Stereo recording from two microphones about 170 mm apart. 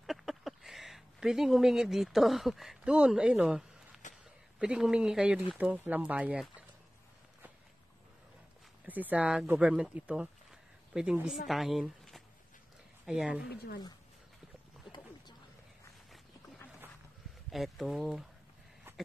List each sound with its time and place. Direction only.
0.0 s a sound: centre (ahead or behind)
4.6 s speech: 5° right (ahead or behind)
8.8 s speech: 10° right (ahead or behind)
13.5 s speech: 70° left (ahead or behind)
17.5 s speech: centre (ahead or behind)